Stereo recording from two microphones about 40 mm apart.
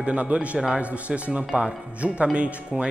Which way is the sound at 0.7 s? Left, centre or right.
Right.